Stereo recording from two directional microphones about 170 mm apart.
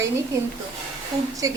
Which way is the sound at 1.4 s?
20° right (ahead or behind).